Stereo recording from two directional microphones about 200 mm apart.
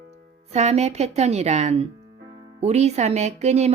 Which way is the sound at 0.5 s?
35° right (ahead or behind).